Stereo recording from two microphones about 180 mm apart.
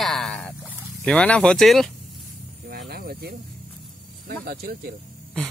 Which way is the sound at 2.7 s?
60° right (ahead or behind).